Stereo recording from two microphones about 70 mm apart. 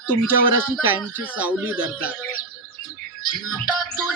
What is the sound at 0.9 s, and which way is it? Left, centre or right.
Speech, right.